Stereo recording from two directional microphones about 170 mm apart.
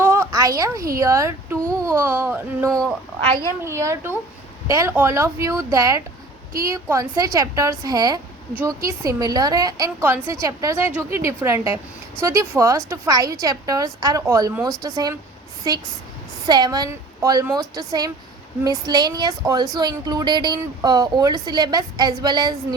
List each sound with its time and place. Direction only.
0.0 s a woman's voice: 15° right (ahead or behind)
3.7 s a woman's voice: 15° right (ahead or behind)